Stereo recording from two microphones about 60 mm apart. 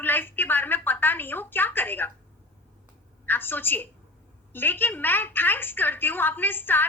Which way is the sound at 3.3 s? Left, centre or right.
Left.